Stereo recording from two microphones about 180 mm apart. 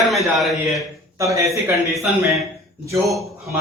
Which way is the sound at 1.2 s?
15° right (ahead or behind).